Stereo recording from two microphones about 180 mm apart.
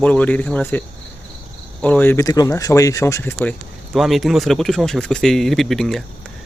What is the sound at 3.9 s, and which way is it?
Speech, centre (ahead or behind).